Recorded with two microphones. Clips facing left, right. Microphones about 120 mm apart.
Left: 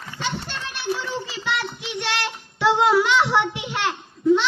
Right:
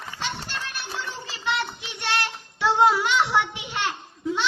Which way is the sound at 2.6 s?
80° left.